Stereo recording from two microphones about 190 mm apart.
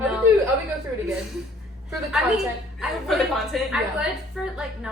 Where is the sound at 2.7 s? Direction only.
Centre (ahead or behind).